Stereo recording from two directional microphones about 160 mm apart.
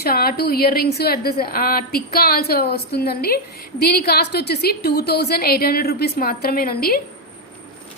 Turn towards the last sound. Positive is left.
turn(degrees=70)  # may be behind; listen again after turning